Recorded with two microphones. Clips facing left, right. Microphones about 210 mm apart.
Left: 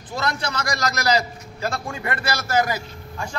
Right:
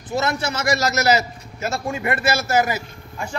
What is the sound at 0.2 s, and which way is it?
A man's voice, 25° right (ahead or behind).